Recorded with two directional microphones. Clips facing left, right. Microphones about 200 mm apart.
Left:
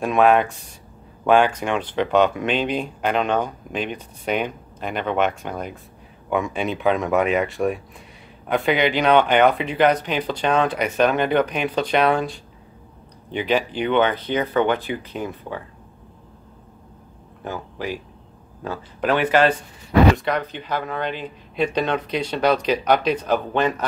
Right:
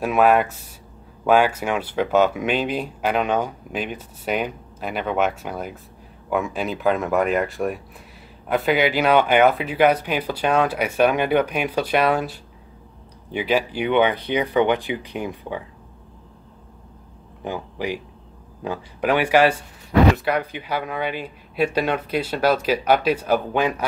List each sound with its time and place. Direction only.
0.0 s speech: 5° right (ahead or behind)
17.4 s speech: 15° right (ahead or behind)